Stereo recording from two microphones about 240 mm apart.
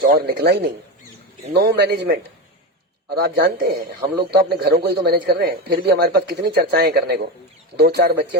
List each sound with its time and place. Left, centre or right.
0.0 s speech: right